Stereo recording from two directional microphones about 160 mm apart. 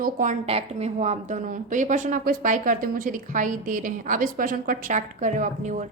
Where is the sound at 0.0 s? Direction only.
55° right (ahead or behind).